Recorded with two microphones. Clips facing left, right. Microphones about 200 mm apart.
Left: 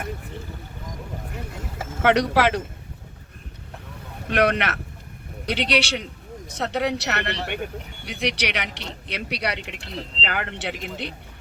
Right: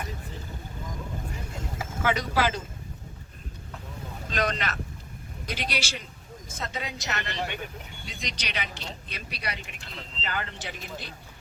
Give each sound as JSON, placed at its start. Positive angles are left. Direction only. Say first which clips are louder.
{"t": 2.0, "sound": "speech", "louder": "left 7 dB", "side_deg": 70}
{"t": 4.3, "sound": "speech", "louder": "left 8 dB", "side_deg": 65}